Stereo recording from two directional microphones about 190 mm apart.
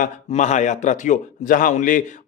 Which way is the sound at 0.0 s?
40° left (ahead or behind).